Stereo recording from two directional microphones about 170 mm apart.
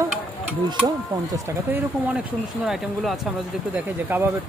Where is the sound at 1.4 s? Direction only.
10° right (ahead or behind).